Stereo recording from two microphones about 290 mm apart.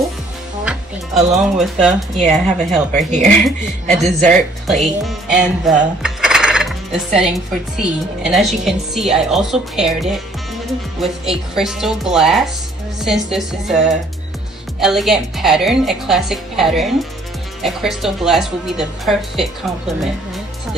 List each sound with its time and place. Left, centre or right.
1.3 s speech: centre
3.1 s a man's voice: right
3.4 s speech: centre
3.9 s a man's voice: right
4.6 s speech: centre